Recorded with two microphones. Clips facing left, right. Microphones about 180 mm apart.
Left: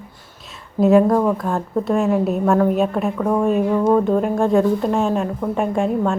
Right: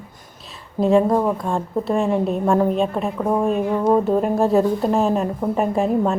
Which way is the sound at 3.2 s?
10° right (ahead or behind).